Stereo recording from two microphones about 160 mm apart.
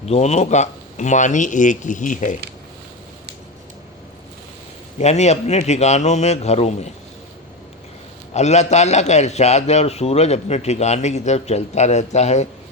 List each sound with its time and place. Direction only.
0.0 s a man's voice: 45° left (ahead or behind)
4.9 s a man's voice: 45° left (ahead or behind)
8.3 s a man's voice: 45° left (ahead or behind)